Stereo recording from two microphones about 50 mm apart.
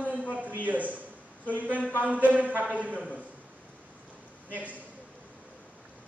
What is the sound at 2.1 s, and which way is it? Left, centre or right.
Speech, right.